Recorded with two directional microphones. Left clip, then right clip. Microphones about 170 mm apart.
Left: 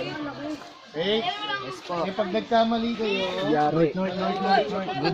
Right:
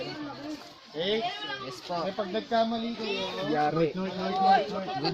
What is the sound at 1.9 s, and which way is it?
Speech, 45° right (ahead or behind).